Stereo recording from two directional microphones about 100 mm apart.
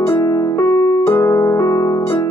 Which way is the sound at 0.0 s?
35° left (ahead or behind).